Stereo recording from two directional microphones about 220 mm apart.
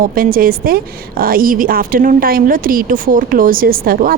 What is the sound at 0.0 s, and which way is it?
Speech, 40° right (ahead or behind).